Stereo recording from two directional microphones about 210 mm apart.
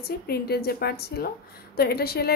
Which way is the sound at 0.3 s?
50° left (ahead or behind).